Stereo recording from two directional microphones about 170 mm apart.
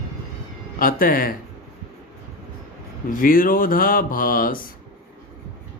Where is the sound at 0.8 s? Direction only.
55° left (ahead or behind).